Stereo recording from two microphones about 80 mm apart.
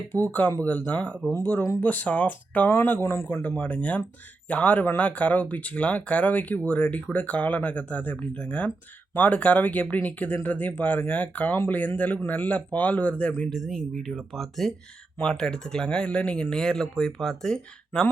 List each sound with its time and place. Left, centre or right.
0.1 s speech: left
13.5 s speech: centre